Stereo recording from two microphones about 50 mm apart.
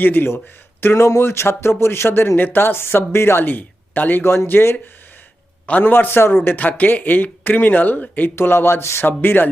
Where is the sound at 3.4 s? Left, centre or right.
Left.